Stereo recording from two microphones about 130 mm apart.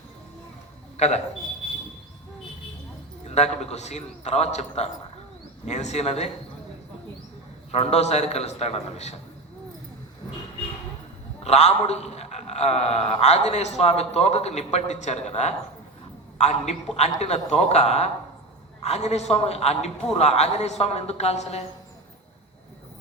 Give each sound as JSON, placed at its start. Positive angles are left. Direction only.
{"t": 0.9, "sound": "a man's voice", "side_deg": 60}
{"t": 3.2, "sound": "a man's voice", "side_deg": 60}
{"t": 7.7, "sound": "a man's voice", "side_deg": 55}
{"t": 11.4, "sound": "a man's voice", "side_deg": 55}